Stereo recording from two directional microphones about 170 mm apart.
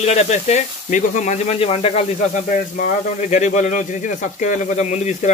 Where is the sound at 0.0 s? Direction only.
40° left (ahead or behind).